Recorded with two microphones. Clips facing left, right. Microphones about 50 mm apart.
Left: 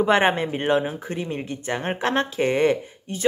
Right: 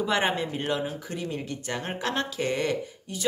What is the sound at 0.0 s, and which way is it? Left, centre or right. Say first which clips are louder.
Speech: left 7 dB; left.